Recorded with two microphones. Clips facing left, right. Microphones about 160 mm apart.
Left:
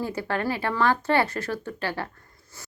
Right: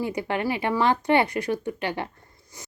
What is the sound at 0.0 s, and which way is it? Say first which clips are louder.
Speech: right 1 dB; 15° right (ahead or behind).